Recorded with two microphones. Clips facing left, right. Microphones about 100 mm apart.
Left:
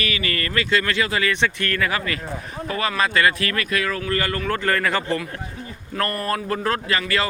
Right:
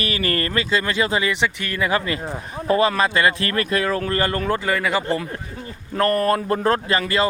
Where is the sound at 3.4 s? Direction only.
35° right (ahead or behind).